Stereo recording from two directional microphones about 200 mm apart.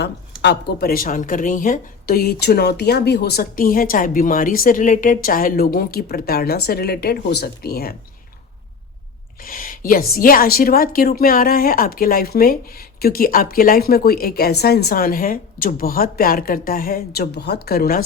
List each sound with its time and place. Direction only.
0.0 s speech: 55° left (ahead or behind)
9.4 s speech: 45° left (ahead or behind)